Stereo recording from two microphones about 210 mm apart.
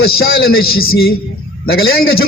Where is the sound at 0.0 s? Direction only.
45° left (ahead or behind).